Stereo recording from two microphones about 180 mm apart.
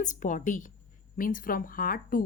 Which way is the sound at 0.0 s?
45° left (ahead or behind).